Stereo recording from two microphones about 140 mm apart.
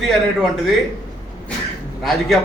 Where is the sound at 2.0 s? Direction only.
Centre (ahead or behind).